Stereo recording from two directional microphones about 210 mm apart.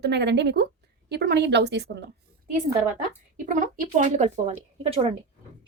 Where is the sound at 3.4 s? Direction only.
40° right (ahead or behind).